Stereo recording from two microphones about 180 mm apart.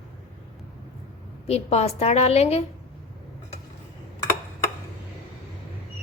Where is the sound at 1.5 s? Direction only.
35° left (ahead or behind).